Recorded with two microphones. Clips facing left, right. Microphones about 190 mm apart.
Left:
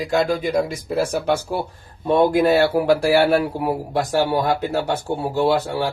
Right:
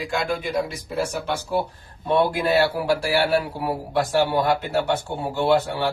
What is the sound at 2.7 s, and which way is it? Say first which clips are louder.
A man's voice: left 6 dB; 55° left (ahead or behind).